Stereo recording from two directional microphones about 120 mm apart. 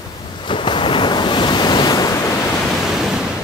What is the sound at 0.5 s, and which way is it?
Waves, 45° left (ahead or behind).